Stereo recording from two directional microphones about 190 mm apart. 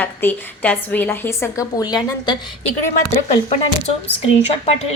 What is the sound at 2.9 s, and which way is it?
A woman's voice, 40° left (ahead or behind).